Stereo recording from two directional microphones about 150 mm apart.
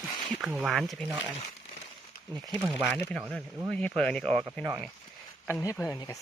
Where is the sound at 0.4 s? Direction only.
5° right (ahead or behind).